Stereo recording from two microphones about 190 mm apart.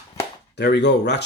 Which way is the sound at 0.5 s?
65° left (ahead or behind).